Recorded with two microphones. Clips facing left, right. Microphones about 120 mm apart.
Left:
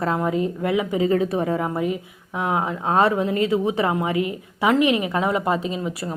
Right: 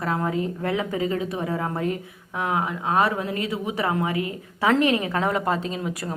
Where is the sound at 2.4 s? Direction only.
25° left (ahead or behind).